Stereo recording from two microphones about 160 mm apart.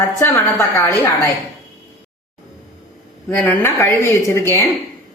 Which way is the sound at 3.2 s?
15° left (ahead or behind).